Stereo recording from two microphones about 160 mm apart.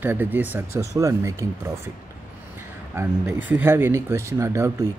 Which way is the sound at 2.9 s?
15° right (ahead or behind).